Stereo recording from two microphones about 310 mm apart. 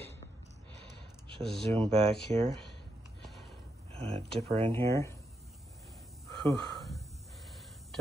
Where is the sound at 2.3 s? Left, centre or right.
Right.